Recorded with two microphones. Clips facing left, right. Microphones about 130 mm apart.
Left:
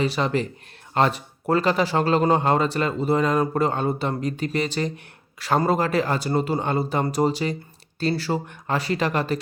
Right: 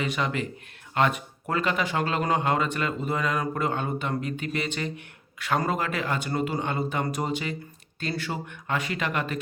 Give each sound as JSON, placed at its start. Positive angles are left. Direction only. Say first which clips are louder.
{"t": 0.0, "sound": "speech", "louder": "left 5 dB", "side_deg": 35}